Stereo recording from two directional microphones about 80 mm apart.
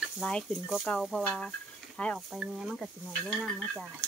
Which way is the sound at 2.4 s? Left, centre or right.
Centre.